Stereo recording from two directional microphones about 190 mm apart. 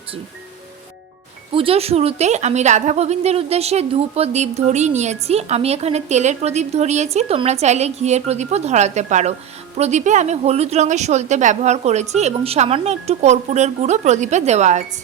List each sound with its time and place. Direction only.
1.5 s a woman's voice: 30° right (ahead or behind)